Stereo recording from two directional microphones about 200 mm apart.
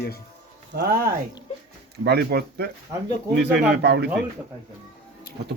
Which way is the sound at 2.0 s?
55° right (ahead or behind).